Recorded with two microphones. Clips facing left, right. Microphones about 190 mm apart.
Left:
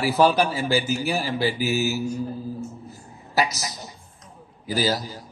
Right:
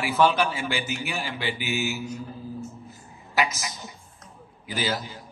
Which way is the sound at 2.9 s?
40° left (ahead or behind).